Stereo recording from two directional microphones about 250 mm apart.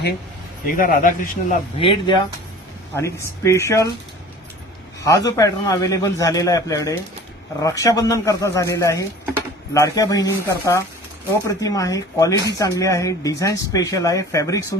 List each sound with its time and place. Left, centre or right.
0.7 s a man's voice: left; by 3.8 s centre
5.0 s a man's voice: centre